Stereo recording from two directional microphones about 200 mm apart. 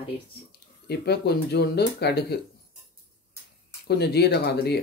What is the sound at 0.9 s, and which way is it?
Speech, 55° left (ahead or behind).